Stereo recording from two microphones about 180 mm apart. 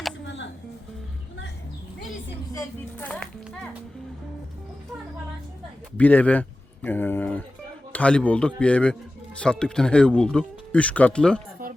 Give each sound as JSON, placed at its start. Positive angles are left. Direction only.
{"t": 2.5, "sound": "a man's voice", "side_deg": 15}
{"t": 3.1, "sound": "speech", "side_deg": 5}
{"t": 6.0, "sound": "a man's voice", "side_deg": 10}